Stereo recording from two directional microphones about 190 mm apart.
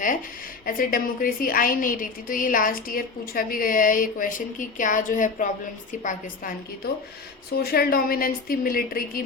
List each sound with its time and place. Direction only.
0.6 s a woman's voice: 45° left (ahead or behind)